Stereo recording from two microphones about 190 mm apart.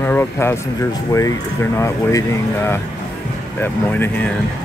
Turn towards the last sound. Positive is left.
turn(degrees=10)  # may be behind; listen again after turning